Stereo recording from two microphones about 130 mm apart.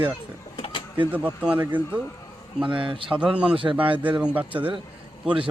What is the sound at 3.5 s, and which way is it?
Speech, 40° right (ahead or behind).